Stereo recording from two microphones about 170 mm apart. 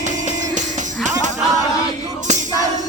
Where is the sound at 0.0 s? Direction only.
45° right (ahead or behind).